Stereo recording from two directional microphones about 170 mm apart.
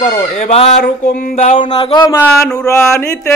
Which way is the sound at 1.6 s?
30° left (ahead or behind).